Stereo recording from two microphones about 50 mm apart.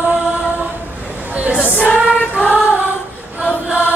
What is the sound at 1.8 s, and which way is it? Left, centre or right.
Choir, right.